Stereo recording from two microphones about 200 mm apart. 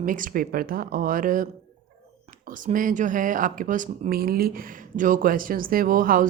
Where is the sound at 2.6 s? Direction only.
40° right (ahead or behind).